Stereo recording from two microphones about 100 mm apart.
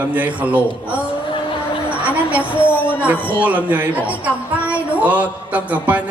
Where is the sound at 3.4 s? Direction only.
15° right (ahead or behind).